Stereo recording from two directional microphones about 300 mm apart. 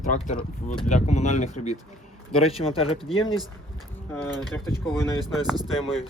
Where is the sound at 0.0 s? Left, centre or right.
Left.